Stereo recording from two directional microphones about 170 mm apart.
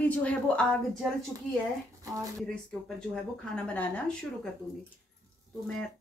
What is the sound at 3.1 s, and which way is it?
A woman's voice, 5° left (ahead or behind).